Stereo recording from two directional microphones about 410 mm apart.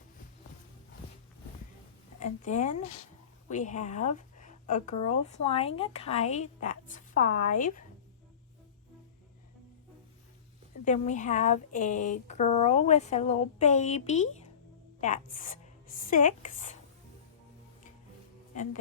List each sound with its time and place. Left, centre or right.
2.1 s a woman's voice: centre
10.8 s speech: centre
18.5 s speech: centre